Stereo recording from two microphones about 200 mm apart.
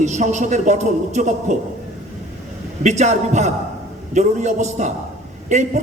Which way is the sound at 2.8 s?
35° right (ahead or behind).